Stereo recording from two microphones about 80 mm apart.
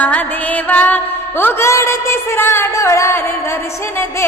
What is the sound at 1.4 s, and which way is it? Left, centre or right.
A man's voice, left.